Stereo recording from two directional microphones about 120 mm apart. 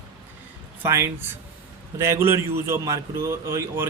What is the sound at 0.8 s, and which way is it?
Speech, 20° right (ahead or behind).